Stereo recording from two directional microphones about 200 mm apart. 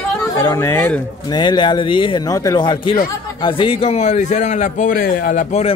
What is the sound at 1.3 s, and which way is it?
A man's voice, 20° left (ahead or behind).